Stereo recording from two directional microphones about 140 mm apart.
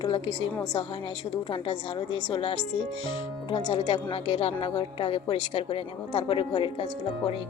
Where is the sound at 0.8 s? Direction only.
40° left (ahead or behind).